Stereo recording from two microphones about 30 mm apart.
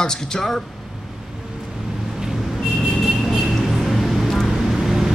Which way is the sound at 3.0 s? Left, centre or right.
Centre.